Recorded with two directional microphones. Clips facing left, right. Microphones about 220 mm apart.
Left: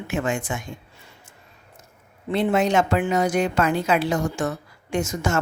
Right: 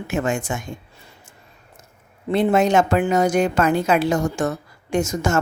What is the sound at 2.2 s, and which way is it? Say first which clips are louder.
A woman's voice: right 3 dB; 45° right (ahead or behind).